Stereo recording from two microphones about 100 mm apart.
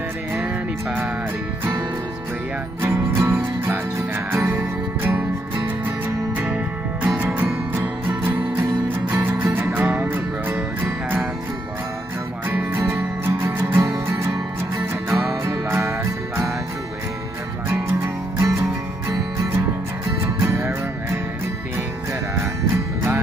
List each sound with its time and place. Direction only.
2.8 s music: 20° right (ahead or behind)
12.4 s music: 25° right (ahead or behind)
15.0 s music: 25° right (ahead or behind)
18.0 s music: 30° right (ahead or behind)
20.4 s music: 25° right (ahead or behind)